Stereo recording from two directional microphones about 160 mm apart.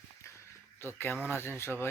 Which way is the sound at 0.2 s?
15° left (ahead or behind).